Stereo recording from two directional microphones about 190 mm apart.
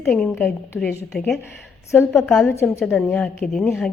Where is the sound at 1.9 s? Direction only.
15° left (ahead or behind).